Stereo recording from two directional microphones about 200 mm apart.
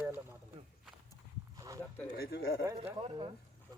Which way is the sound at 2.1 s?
50° left (ahead or behind).